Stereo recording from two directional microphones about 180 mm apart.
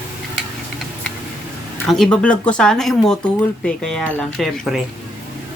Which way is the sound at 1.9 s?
5° left (ahead or behind).